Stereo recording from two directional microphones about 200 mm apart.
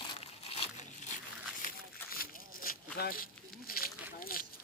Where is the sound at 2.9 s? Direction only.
50° left (ahead or behind).